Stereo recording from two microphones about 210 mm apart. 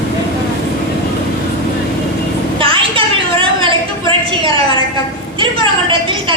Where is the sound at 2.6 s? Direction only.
25° right (ahead or behind).